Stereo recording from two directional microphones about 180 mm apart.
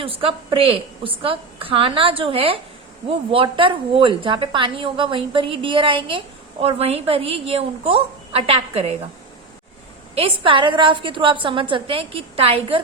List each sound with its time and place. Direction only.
0.0 s a woman's voice: 30° right (ahead or behind)
10.2 s a woman's voice: 30° right (ahead or behind)